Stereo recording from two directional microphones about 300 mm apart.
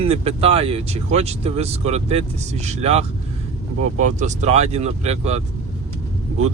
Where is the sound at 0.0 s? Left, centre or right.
Centre.